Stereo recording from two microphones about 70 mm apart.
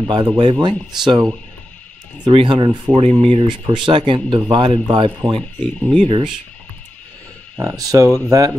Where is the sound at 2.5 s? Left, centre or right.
Right.